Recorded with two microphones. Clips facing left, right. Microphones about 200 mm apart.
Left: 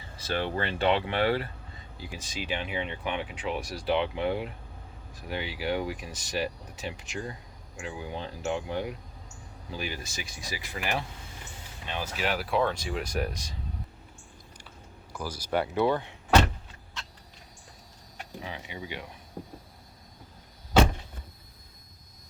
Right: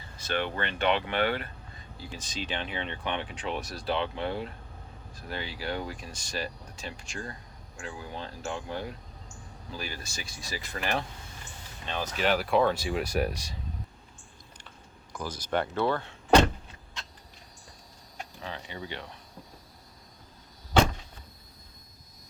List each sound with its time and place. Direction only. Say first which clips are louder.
0.2 s speech: left 1 dB; 30° left (ahead or behind)
2.0 s speech: even; 15° left (ahead or behind); by 13.0 s 10° right (ahead or behind)
15.1 s speech: left 1 dB; 10° left (ahead or behind)
18.3 s speech: left 1 dB; 15° left (ahead or behind)